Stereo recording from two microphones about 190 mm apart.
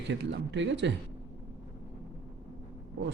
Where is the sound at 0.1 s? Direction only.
70° right (ahead or behind).